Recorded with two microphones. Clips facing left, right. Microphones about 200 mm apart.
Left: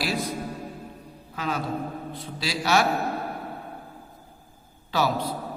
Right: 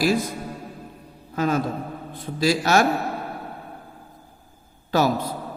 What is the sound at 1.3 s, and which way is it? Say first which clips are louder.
A man's voice: right 6 dB; 45° right (ahead or behind).